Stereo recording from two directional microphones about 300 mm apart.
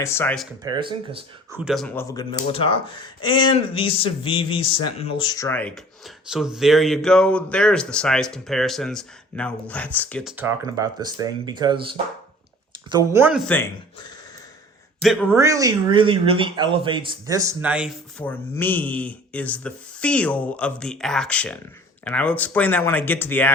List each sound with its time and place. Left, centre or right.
0.0 s speech: centre
0.6 s speech: centre
1.6 s speech: centre
15.0 s speech: centre